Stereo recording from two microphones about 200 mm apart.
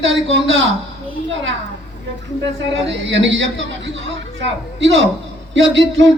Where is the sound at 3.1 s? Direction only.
65° right (ahead or behind).